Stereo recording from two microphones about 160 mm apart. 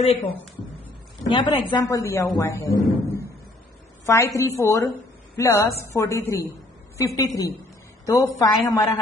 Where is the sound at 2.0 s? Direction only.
15° left (ahead or behind).